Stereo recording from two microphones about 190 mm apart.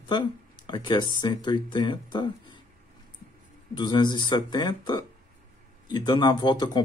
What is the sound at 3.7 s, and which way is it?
Speech, 25° left (ahead or behind).